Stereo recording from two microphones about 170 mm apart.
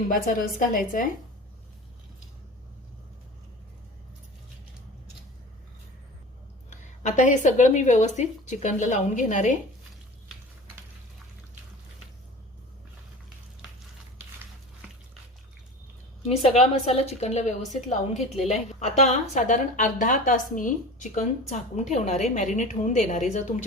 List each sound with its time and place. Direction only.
0.1 s a woman's voice: 50° left (ahead or behind)
6.7 s a woman's voice: 45° left (ahead or behind)
16.4 s a woman's voice: 35° left (ahead or behind)